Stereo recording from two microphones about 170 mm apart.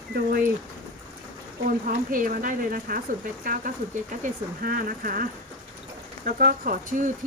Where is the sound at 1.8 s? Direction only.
55° right (ahead or behind).